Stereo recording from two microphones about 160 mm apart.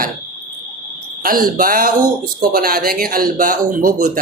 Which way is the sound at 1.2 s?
65° right (ahead or behind).